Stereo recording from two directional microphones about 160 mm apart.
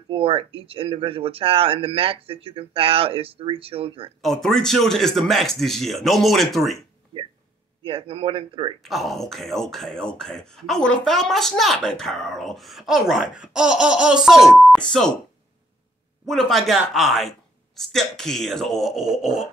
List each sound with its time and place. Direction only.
0.1 s speech: 35° right (ahead or behind)
4.2 s speech: centre (ahead or behind)
7.8 s speech: 35° right (ahead or behind)
8.8 s speech: centre (ahead or behind)
16.3 s speech: centre (ahead or behind)